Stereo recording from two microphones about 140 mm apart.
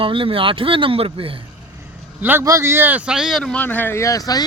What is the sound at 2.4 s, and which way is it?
Speech, 20° right (ahead or behind).